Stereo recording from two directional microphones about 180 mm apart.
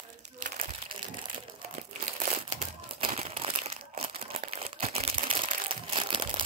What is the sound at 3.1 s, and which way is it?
Crumpling, 35° right (ahead or behind).